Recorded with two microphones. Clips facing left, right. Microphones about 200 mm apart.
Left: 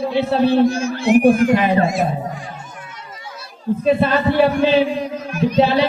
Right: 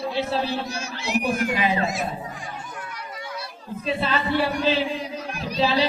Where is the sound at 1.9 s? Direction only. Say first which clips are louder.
Left 8 dB; centre (ahead or behind).